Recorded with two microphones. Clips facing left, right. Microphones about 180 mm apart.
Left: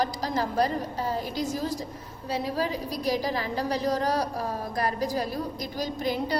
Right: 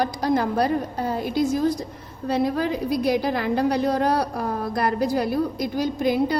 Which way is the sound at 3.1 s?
55° right (ahead or behind).